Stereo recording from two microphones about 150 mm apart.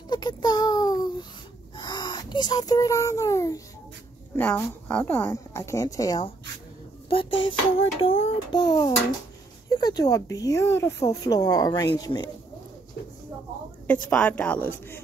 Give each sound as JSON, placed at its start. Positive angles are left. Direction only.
{"t": 0.1, "sound": "child singing", "side_deg": 30}
{"t": 1.8, "sound": "speech", "side_deg": 30}
{"t": 4.4, "sound": "speech", "side_deg": 10}
{"t": 7.1, "sound": "a sound", "side_deg": 35}
{"t": 8.0, "sound": "speech", "side_deg": 35}
{"t": 14.1, "sound": "speech", "side_deg": 10}